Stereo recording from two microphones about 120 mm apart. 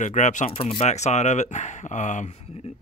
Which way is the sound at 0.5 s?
55° left (ahead or behind).